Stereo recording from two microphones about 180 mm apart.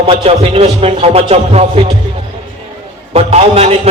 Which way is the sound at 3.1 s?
35° right (ahead or behind).